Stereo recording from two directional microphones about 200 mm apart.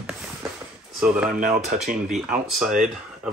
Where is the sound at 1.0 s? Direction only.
5° right (ahead or behind).